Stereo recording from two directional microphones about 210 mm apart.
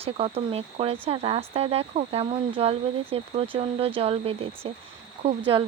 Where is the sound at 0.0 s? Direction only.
30° right (ahead or behind).